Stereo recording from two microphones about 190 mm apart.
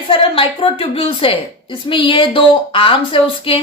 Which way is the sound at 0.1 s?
30° left (ahead or behind).